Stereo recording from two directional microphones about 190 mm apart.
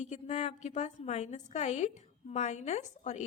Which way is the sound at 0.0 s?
35° left (ahead or behind).